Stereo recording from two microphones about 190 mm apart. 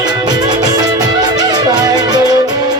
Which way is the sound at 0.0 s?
20° right (ahead or behind).